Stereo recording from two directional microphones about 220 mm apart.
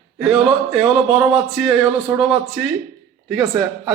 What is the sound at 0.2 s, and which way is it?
Speech, centre (ahead or behind).